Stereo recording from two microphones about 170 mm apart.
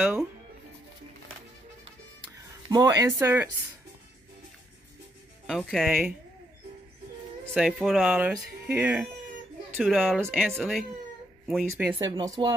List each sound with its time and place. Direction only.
2.7 s speech: 20° right (ahead or behind)
5.5 s speech: 5° left (ahead or behind)
7.5 s speech: centre (ahead or behind)
12.0 s speech: 20° right (ahead or behind)